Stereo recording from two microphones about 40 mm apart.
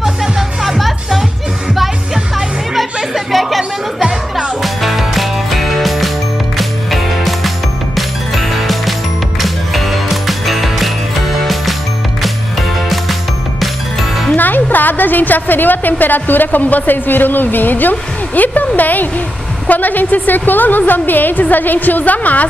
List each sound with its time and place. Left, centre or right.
0.0 s music: centre
2.3 s music: centre
14.3 s a woman's voice: left